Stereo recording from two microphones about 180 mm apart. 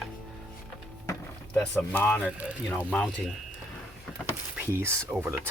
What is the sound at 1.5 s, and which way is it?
Speech, 10° left (ahead or behind).